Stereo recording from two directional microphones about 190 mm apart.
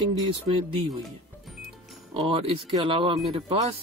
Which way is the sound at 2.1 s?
30° right (ahead or behind).